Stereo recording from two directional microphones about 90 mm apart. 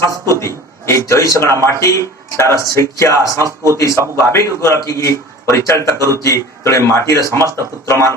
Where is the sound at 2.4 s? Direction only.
35° left (ahead or behind).